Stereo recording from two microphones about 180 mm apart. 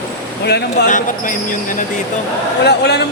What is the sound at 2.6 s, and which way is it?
Speech, 70° left (ahead or behind).